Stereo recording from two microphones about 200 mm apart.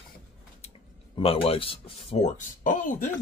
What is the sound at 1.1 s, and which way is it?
Speech, 30° left (ahead or behind).